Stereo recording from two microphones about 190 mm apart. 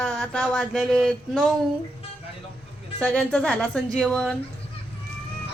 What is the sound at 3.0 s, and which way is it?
A woman's voice, 5° left (ahead or behind).